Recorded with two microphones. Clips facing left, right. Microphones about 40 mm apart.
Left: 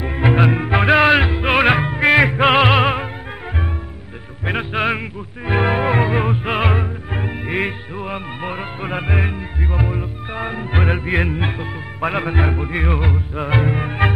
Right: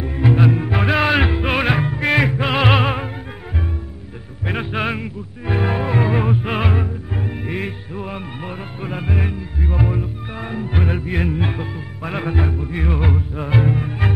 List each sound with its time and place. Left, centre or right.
0.0 s music: left; by 1.1 s centre
1.1 s music: centre
1.4 s music: centre
4.5 s music: centre
4.9 s music: left
7.1 s music: left
9.7 s music: centre
10.3 s music: left
12.4 s music: left
13.3 s music: left